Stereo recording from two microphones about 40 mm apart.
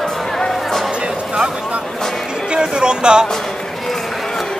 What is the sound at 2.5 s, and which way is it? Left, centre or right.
Speech, right.